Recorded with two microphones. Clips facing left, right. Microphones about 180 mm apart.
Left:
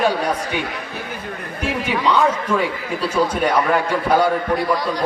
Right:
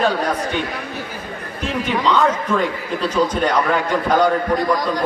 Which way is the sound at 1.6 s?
10° left (ahead or behind).